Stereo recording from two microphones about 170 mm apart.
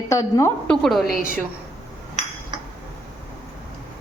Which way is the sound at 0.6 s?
5° left (ahead or behind).